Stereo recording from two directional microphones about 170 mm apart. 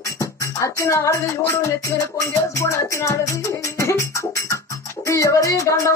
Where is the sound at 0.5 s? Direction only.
15° left (ahead or behind).